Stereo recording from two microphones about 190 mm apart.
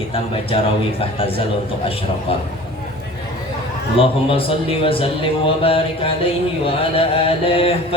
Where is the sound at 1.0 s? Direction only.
30° left (ahead or behind).